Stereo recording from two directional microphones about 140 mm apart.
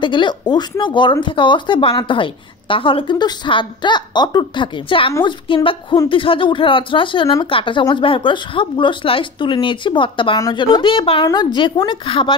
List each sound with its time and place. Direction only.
0.0 s a woman's voice: 35° left (ahead or behind)